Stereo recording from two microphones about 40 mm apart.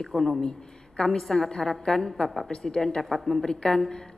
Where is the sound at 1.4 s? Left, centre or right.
Centre.